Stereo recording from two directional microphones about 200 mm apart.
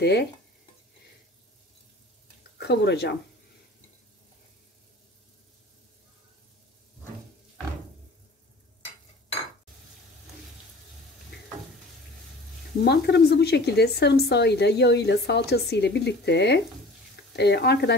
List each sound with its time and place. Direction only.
0.0 s speech: 55° left (ahead or behind)
2.6 s speech: 55° left (ahead or behind)
12.8 s speech: 55° left (ahead or behind)